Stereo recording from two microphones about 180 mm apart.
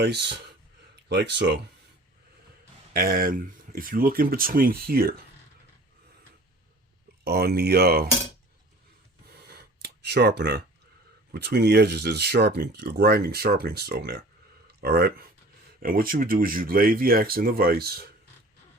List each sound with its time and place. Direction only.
1.0 s speech: 70° right (ahead or behind)
2.9 s speech: 55° right (ahead or behind)
7.3 s speech: 60° right (ahead or behind)
9.5 s a sound: 65° right (ahead or behind)
11.4 s speech: 65° right (ahead or behind)